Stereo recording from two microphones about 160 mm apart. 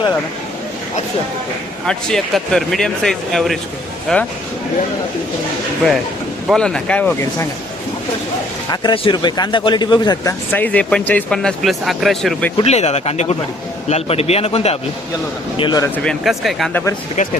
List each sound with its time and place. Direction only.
1.9 s speech: 5° left (ahead or behind)
6.5 s speech: 5° left (ahead or behind)
8.7 s speech: 30° left (ahead or behind)
10.5 s speech: 10° left (ahead or behind)
12.5 s a man's voice: 40° left (ahead or behind)
16.0 s speech: centre (ahead or behind)
17.2 s speech: 50° left (ahead or behind)